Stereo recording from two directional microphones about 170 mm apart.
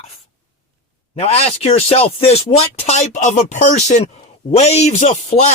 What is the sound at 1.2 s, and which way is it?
Speech, 35° left (ahead or behind).